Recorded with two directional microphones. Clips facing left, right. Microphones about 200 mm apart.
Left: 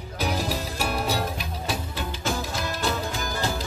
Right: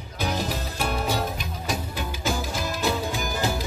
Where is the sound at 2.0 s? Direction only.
5° right (ahead or behind).